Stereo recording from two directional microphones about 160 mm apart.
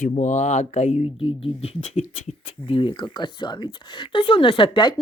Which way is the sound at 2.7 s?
30° left (ahead or behind).